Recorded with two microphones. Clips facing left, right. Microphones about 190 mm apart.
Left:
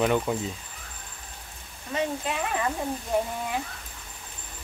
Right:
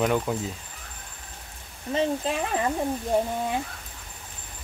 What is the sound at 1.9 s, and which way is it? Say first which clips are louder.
Speech: right 4 dB; 30° right (ahead or behind).